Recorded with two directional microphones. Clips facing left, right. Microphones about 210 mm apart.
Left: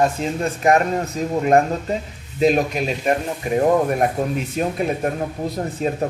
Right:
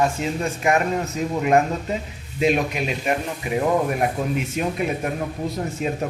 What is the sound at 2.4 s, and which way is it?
Speech, 40° left (ahead or behind).